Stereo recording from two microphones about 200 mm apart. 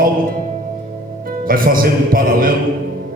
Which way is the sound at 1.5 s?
45° right (ahead or behind).